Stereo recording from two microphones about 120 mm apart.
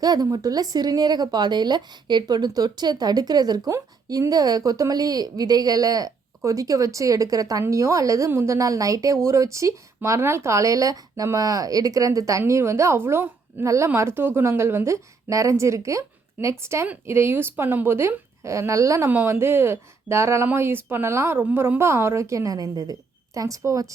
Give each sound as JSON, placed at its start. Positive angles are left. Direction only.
{"t": 0.0, "sound": "speech", "side_deg": -30}